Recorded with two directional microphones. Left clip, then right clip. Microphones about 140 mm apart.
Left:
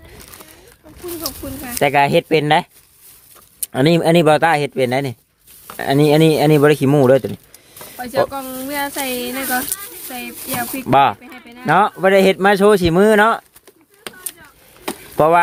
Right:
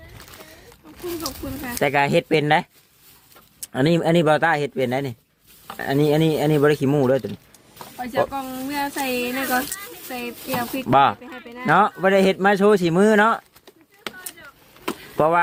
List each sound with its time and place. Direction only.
1.2 s speech: 35° left (ahead or behind)
8.3 s speech: 65° left (ahead or behind); by 10.8 s 45° left (ahead or behind)
10.8 s speech: 25° left (ahead or behind)
15.1 s chop: 35° left (ahead or behind)